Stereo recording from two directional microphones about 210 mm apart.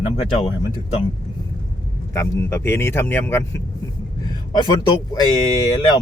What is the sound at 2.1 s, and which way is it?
Speech, 15° left (ahead or behind).